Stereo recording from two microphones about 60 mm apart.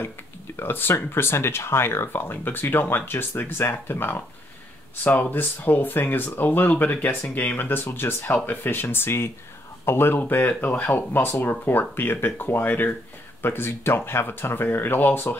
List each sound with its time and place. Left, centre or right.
0.6 s speech: left